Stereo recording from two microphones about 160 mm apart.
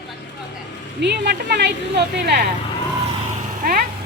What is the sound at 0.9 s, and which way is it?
Speech, 90° right.